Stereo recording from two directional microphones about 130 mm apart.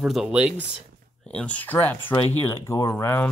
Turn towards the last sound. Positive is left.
turn(degrees=15)  # may be behind; listen again after turning